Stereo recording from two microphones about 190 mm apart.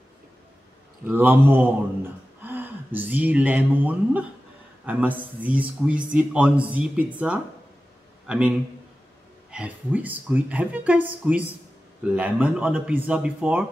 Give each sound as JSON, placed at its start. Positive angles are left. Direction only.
{"t": 1.0, "sound": "a man's voice", "side_deg": -10}